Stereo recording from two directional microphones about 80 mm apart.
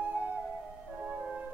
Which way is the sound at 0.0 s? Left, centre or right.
Centre.